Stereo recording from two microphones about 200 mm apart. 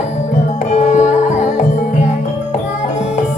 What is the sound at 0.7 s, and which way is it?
Tabla, 35° left (ahead or behind).